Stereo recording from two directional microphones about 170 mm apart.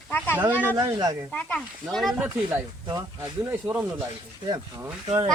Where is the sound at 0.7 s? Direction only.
20° right (ahead or behind).